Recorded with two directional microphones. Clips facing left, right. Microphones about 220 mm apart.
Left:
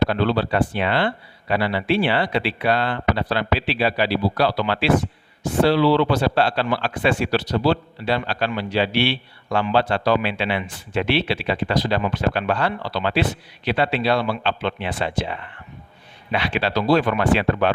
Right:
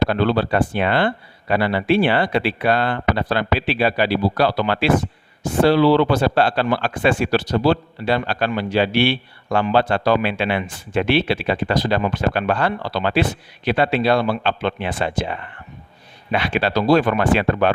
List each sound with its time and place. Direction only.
0.1 s speech: 50° right (ahead or behind)